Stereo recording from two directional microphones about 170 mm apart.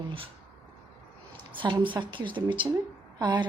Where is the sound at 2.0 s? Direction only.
30° right (ahead or behind).